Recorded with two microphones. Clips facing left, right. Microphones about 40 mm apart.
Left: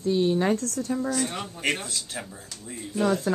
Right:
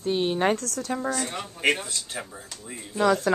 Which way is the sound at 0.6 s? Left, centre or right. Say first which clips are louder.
Left 2 dB; right.